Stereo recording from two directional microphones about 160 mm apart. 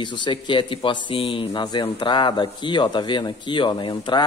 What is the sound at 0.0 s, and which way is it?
Speech, 30° left (ahead or behind).